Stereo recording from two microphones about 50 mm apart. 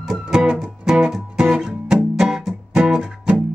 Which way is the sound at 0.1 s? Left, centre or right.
Centre.